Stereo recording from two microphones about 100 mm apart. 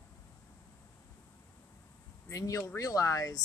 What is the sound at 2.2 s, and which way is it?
Speech, 35° left (ahead or behind).